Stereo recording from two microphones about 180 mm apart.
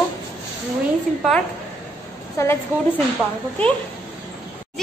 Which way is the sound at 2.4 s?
15° left (ahead or behind).